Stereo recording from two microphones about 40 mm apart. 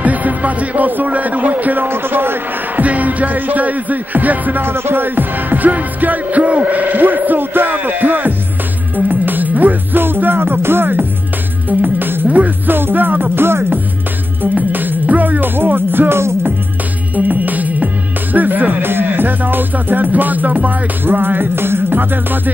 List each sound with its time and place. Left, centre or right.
0.0 s speech: right
1.9 s a man's voice: right
2.8 s music: right
4.6 s music: right
12.6 s music: right
14.5 s music: right
17.1 s music: right
18.9 s music: right